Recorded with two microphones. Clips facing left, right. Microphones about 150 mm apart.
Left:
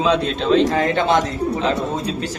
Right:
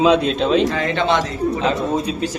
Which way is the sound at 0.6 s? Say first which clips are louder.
Left 1 dB; 45° left (ahead or behind).